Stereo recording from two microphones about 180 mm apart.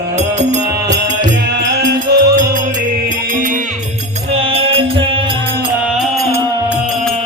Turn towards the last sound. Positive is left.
turn(degrees=-30)  # may be behind; listen again after turning